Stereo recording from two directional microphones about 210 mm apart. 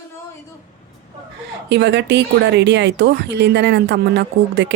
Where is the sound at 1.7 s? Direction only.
55° right (ahead or behind).